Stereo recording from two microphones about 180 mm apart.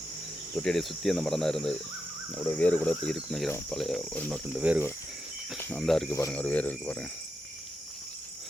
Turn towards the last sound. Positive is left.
turn(degrees=10)  # may be behind; listen again after turning